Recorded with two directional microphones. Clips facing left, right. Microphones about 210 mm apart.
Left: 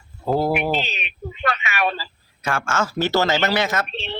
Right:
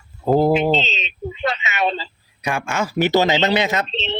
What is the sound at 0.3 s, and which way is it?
Speech, 20° right (ahead or behind).